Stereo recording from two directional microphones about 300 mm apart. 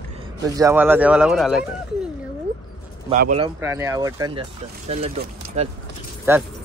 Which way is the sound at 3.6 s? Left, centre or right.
Centre.